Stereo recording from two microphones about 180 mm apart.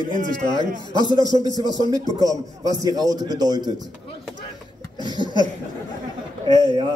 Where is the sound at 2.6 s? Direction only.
20° right (ahead or behind).